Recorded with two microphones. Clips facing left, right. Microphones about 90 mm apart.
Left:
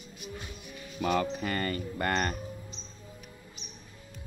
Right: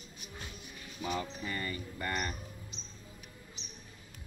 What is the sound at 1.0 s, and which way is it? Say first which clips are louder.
Music: left 8 dB; 75° left (ahead or behind).